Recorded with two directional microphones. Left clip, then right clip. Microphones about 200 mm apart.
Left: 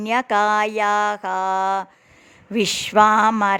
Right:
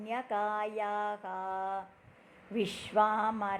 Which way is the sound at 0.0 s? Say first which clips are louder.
Left 15 dB; 45° left (ahead or behind).